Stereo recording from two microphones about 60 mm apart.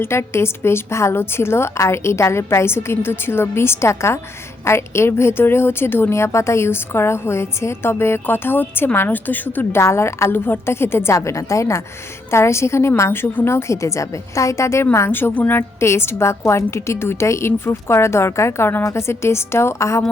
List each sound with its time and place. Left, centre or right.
0.0 s a woman's voice: left
9.7 s a woman's voice: left
10.3 s a woman's voice: left
11.1 s a woman's voice: left
15.4 s a woman's voice: left
15.8 s a woman's voice: left